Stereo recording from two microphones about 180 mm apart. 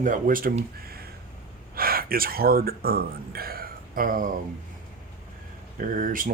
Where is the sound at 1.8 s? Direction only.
55° right (ahead or behind).